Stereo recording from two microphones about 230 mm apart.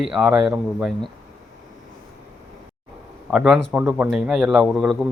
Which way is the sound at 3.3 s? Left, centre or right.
Centre.